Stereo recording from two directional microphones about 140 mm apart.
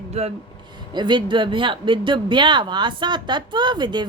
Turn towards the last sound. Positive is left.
turn(degrees=-30)  # may be behind; listen again after turning